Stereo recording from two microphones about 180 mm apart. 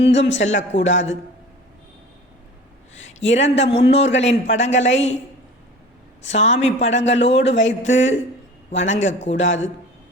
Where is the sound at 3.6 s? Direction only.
35° left (ahead or behind).